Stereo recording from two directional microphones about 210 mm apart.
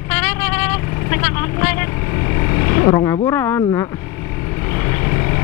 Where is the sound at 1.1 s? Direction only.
10° left (ahead or behind).